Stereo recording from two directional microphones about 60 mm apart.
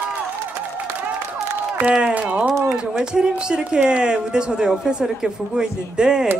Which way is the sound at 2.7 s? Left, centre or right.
Centre.